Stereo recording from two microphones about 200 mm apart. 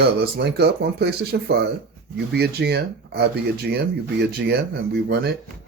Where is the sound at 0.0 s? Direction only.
55° right (ahead or behind).